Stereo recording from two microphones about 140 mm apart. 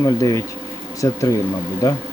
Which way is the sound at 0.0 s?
25° left (ahead or behind).